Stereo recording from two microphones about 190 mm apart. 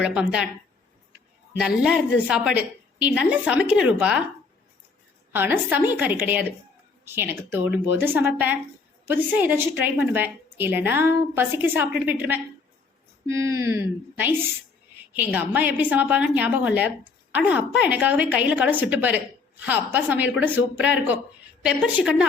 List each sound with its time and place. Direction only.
0.0 s a woman's voice: 5° right (ahead or behind)
1.5 s a woman's voice: 5° right (ahead or behind)
5.3 s a woman's voice: 10° right (ahead or behind)